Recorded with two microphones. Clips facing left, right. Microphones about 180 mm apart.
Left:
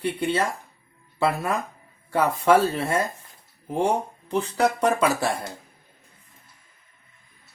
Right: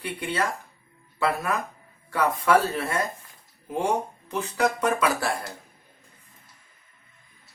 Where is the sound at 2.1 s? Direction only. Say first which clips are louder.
Left 2 dB; 30° left (ahead or behind).